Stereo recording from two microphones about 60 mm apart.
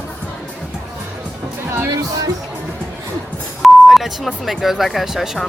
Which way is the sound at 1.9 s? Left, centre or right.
Right.